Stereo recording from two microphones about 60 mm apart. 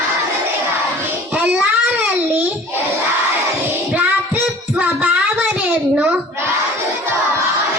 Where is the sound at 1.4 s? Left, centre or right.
Right.